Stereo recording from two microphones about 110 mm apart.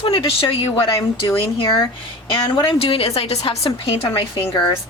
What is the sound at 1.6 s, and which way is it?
Speech, 35° left (ahead or behind).